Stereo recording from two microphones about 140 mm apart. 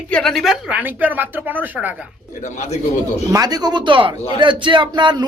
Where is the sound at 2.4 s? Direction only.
55° left (ahead or behind).